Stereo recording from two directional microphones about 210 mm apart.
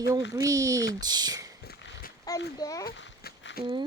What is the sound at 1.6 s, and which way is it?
Dog, 50° left (ahead or behind).